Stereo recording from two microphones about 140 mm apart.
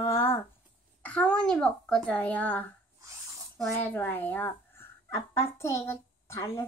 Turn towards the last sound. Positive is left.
turn(degrees=20)  # may be behind; listen again after turning